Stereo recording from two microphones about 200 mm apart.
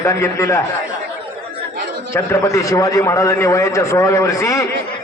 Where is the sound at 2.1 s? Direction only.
15° left (ahead or behind).